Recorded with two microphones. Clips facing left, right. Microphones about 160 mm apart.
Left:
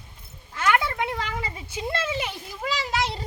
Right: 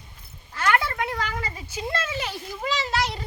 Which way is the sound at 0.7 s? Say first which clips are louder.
Even; 20° left (ahead or behind).